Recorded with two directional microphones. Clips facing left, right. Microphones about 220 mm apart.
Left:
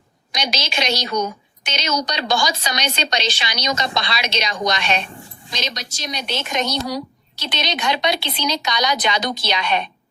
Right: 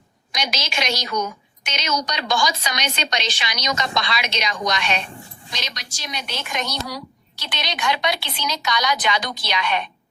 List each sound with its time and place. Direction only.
0.3 s a woman's voice: 30° left (ahead or behind)
6.1 s a woman's voice: 35° left (ahead or behind)
6.3 s a woman's voice: 25° left (ahead or behind)